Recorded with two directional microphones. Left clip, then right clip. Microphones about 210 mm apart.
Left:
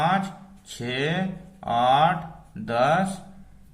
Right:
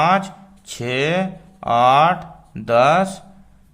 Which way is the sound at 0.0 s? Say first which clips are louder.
Right 7 dB; 35° right (ahead or behind).